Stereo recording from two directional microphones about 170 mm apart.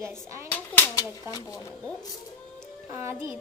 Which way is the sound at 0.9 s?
20° left (ahead or behind).